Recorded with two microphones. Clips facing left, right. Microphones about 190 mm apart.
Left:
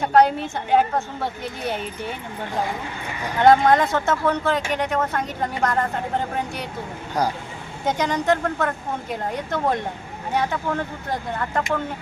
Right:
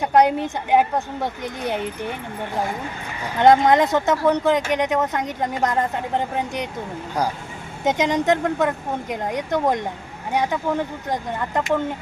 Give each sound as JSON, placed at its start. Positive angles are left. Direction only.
{"t": 0.0, "sound": "speech", "side_deg": -15}
{"t": 3.3, "sound": "speech", "side_deg": -20}
{"t": 7.9, "sound": "speech", "side_deg": -20}